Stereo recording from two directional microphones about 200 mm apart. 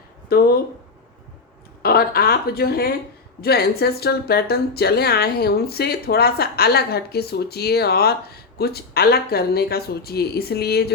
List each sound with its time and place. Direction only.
0.3 s speech: 50° left (ahead or behind)
1.8 s speech: 50° left (ahead or behind)